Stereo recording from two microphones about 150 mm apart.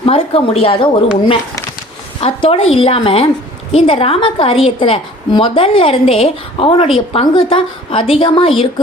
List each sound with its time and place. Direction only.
0.0 s a woman's voice: 40° left (ahead or behind)
2.2 s a woman's voice: 40° left (ahead or behind)